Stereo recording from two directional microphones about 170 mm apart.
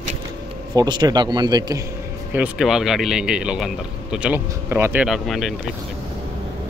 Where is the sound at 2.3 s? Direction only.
5° right (ahead or behind).